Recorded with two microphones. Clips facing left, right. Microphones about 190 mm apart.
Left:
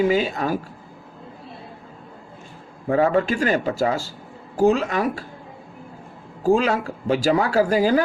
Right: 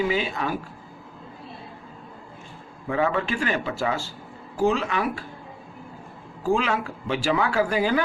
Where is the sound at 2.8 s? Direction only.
40° left (ahead or behind).